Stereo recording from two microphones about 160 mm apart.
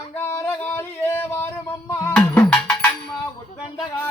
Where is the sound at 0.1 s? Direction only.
15° left (ahead or behind).